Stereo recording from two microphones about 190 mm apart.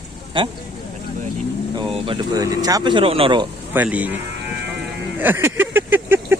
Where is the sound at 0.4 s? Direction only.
25° right (ahead or behind).